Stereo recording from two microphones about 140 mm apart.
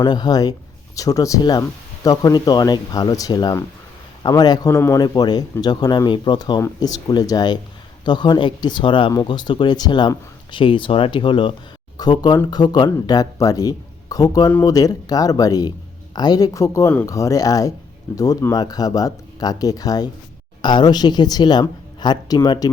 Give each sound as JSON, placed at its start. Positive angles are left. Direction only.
{"t": 0.0, "sound": "a woman's voice", "side_deg": 30}